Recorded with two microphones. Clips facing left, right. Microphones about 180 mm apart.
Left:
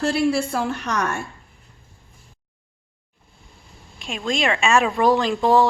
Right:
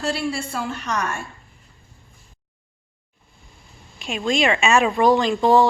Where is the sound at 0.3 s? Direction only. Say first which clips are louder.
Left 5 dB; 60° left (ahead or behind).